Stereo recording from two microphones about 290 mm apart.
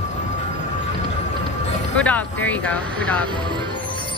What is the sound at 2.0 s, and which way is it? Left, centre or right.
Speech, centre.